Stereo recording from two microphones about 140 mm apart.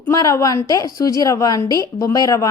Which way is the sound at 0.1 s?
25° left (ahead or behind).